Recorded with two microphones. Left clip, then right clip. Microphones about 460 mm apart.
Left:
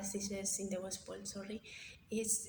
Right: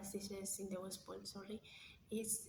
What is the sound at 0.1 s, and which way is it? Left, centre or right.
A woman's voice, right.